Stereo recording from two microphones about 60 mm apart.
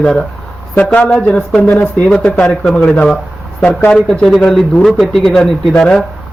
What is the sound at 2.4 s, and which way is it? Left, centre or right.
Speech, centre.